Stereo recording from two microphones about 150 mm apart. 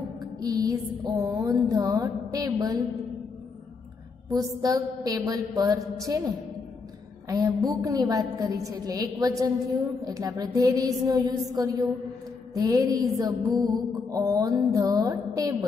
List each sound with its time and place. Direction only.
0.4 s mantra: 25° right (ahead or behind)
4.3 s mantra: 25° right (ahead or behind)